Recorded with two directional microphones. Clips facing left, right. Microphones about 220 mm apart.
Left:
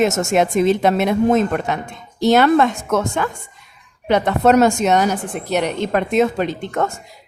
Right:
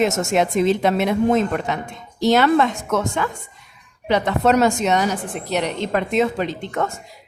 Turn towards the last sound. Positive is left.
turn(degrees=45)  # may be behind; listen again after turning